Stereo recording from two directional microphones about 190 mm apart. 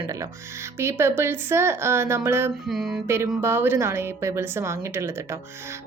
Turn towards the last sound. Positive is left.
turn(degrees=-15)  # may be behind; listen again after turning